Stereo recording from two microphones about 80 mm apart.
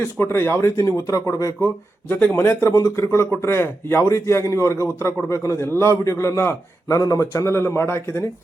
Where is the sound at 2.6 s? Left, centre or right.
Left.